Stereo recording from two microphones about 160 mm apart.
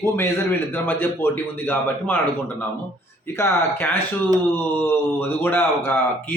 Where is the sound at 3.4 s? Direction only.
15° left (ahead or behind).